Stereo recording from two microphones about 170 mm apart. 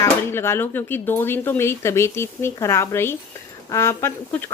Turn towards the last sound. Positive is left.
turn(degrees=15)  # may be behind; listen again after turning